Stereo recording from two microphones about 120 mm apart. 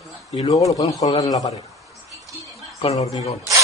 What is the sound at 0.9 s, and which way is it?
Speech, 30° left (ahead or behind).